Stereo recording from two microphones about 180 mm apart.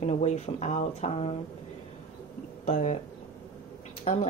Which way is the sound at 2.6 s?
40° left (ahead or behind).